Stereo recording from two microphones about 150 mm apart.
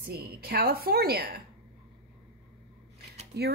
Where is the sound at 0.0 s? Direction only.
90° right.